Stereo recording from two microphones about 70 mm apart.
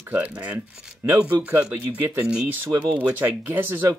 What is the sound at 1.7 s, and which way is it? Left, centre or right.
Speech, right.